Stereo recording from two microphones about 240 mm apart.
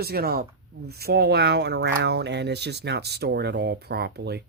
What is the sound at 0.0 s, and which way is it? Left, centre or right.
Speech, right.